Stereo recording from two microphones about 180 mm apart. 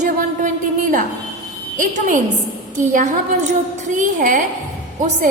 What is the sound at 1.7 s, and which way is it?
A woman's voice, 45° right (ahead or behind).